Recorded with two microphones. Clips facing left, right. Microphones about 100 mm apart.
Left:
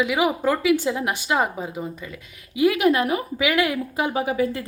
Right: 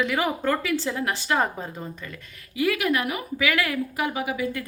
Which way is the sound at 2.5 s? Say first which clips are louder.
Left 5 dB; 20° left (ahead or behind).